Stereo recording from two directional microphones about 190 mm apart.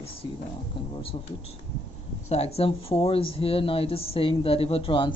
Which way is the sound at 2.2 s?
35° left (ahead or behind).